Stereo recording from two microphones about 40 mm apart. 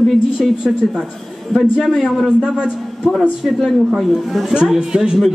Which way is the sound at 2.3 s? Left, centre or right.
Right.